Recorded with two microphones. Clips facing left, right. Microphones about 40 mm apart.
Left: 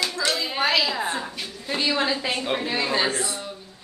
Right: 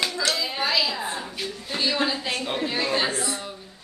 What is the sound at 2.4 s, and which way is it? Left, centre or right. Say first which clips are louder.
Speech: left 1 dB; centre.